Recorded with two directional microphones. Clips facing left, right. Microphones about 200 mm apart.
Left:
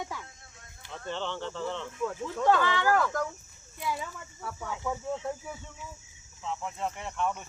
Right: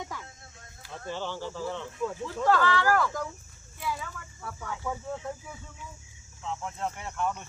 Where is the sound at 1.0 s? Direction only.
5° right (ahead or behind).